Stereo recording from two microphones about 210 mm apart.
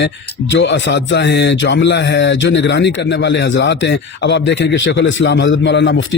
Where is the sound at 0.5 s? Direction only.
60° left (ahead or behind).